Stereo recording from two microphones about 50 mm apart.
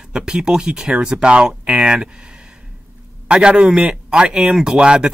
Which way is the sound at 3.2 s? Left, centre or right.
Right.